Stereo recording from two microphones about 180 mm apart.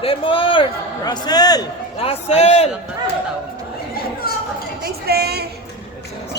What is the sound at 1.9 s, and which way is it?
Speech, 35° left (ahead or behind).